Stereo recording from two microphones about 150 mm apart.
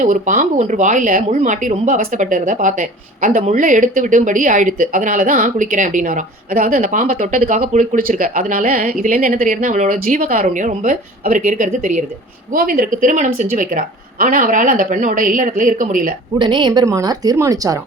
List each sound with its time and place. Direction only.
0.0 s speech: 55° right (ahead or behind)
12.5 s speech: 70° right (ahead or behind)
16.4 s a woman's voice: 30° right (ahead or behind)